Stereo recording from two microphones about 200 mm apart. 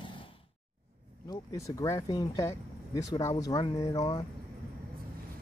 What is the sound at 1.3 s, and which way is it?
Speech, 20° left (ahead or behind).